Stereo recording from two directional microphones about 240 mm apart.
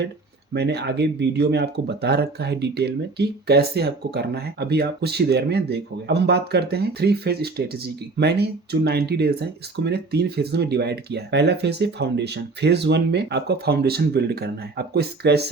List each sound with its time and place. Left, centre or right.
0.5 s speech: right